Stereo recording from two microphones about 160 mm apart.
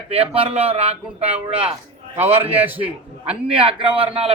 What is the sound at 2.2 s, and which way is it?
Speech, 10° right (ahead or behind).